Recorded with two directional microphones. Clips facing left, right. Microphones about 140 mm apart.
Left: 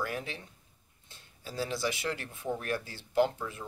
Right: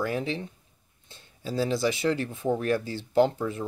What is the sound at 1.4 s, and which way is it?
Speech, 25° right (ahead or behind).